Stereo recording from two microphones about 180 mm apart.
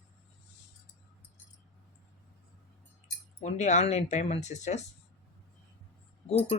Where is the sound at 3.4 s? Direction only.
40° left (ahead or behind).